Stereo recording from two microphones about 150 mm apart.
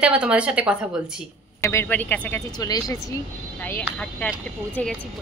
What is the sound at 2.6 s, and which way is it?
Speech, 25° left (ahead or behind).